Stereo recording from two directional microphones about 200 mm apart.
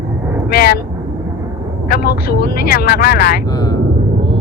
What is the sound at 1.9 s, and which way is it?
Speech, 50° left (ahead or behind).